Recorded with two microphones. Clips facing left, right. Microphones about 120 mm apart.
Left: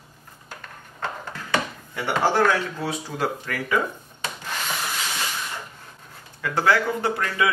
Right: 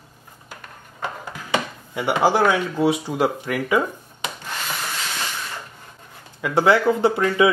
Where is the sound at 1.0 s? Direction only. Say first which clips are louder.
Right 1 dB; 10° right (ahead or behind).